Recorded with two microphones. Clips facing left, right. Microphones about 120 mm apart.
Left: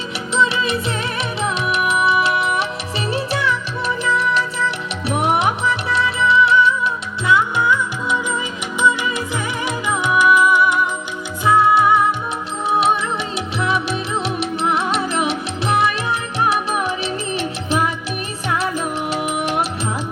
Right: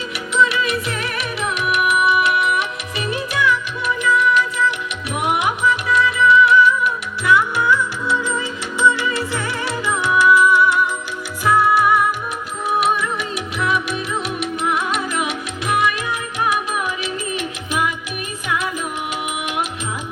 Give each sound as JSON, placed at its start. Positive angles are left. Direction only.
{"t": 0.3, "sound": "music", "side_deg": 25}